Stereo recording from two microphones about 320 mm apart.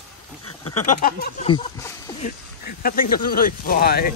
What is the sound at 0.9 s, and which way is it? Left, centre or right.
Speech, left.